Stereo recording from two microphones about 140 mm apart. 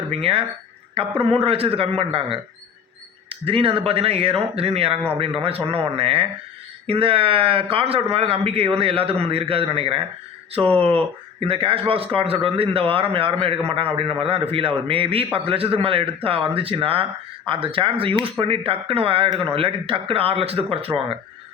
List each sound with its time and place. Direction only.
0.1 s speech: 45° right (ahead or behind)